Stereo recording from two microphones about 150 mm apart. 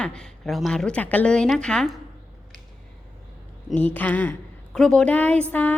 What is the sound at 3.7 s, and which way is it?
A woman's voice, 10° left (ahead or behind).